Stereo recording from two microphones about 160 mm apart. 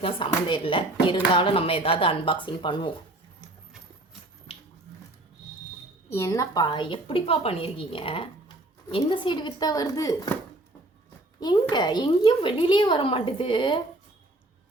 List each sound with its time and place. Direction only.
0.0 s speech: 30° left (ahead or behind)
6.1 s a woman's voice: 20° left (ahead or behind)
11.3 s a woman's voice: 25° left (ahead or behind)